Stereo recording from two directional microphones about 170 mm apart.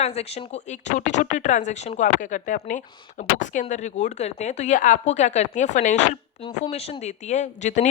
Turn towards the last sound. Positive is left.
turn(degrees=45)  # may be behind; listen again after turning